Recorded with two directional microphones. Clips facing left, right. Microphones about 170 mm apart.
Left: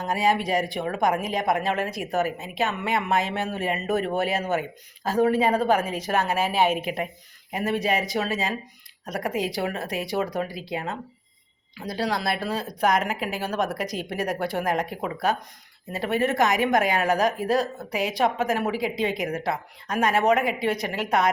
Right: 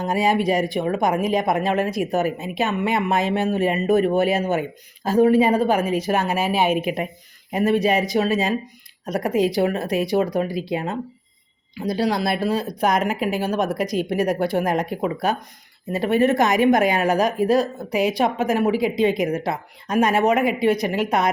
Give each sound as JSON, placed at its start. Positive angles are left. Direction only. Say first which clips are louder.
{"t": 0.0, "sound": "a woman's voice", "louder": "right 4 dB", "side_deg": -15}